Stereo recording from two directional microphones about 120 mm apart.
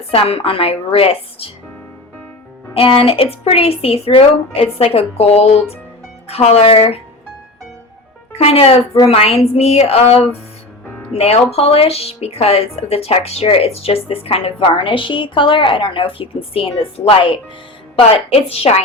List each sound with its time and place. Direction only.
0.1 s a woman's voice: 50° left (ahead or behind)
2.7 s a woman's voice: 50° left (ahead or behind)
8.4 s speech: 55° left (ahead or behind)
11.5 s a woman's voice: 55° left (ahead or behind)